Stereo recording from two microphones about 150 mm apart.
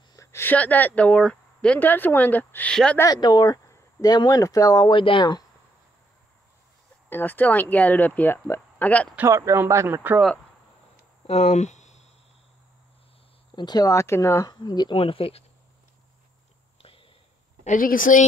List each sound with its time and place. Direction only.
0.1 s speech: 20° left (ahead or behind)
3.0 s speech: 25° left (ahead or behind)
7.1 s speech: 15° left (ahead or behind)
9.1 s speech: 15° right (ahead or behind)
11.2 s a sound: 50° left (ahead or behind)
13.6 s speech: 25° left (ahead or behind)
14.5 s speech: 30° left (ahead or behind)
15.0 s speech: 40° left (ahead or behind)
17.6 s a woman's voice: 65° left (ahead or behind)